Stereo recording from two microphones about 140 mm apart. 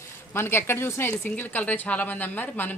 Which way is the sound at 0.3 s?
15° left (ahead or behind).